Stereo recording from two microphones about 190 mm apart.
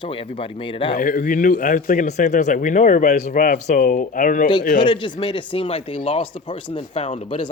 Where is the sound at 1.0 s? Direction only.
45° left (ahead or behind).